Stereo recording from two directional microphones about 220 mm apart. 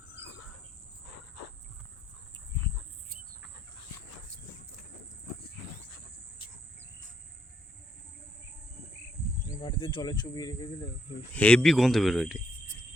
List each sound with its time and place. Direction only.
9.6 s speech: 20° left (ahead or behind)
11.3 s speech: 5° left (ahead or behind)